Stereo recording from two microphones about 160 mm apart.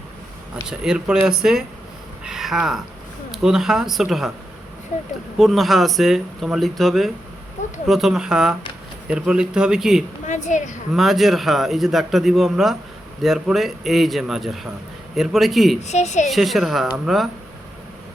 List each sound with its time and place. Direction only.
0.7 s a man's voice: 5° right (ahead or behind)
5.4 s a man's voice: centre (ahead or behind)
10.2 s speech: 50° left (ahead or behind)
10.9 s a man's voice: centre (ahead or behind)
15.8 s speech: 45° left (ahead or behind)
16.3 s a man's voice: centre (ahead or behind)